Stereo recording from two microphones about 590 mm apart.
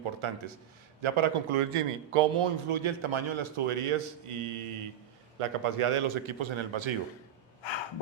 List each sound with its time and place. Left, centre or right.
0.0 s a man's voice: right